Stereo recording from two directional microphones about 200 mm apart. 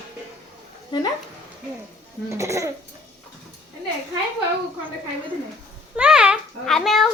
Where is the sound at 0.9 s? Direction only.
20° left (ahead or behind).